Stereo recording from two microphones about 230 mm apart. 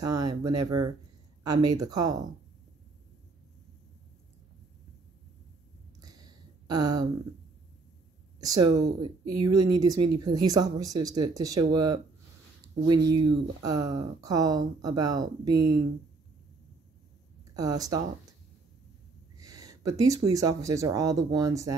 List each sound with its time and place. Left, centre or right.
0.0 s speech: centre
5.9 s a sound: centre
8.4 s speech: centre
17.6 s speech: centre
19.3 s speech: centre